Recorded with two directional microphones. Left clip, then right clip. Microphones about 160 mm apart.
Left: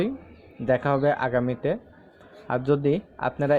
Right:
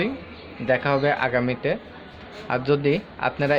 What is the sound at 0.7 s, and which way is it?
A man's voice, 35° left (ahead or behind).